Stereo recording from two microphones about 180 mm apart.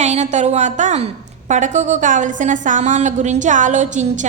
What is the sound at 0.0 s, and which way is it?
A woman's voice, 40° right (ahead or behind).